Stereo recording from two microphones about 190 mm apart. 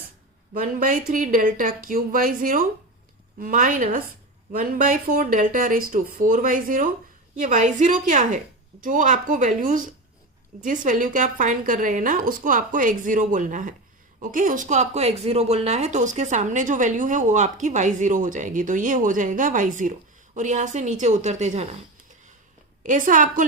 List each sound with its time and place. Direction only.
0.5 s a woman's voice: 45° right (ahead or behind)
22.8 s a woman's voice: 45° right (ahead or behind)